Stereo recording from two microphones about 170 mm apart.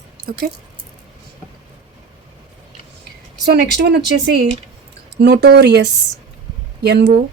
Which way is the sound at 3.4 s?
70° right (ahead or behind).